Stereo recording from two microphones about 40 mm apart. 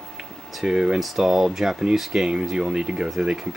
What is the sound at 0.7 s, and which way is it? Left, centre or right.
Speech, centre.